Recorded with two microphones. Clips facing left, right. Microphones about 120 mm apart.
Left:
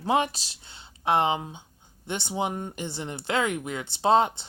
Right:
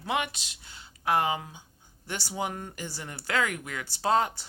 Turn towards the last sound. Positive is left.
turn(degrees=25)  # may be behind; listen again after turning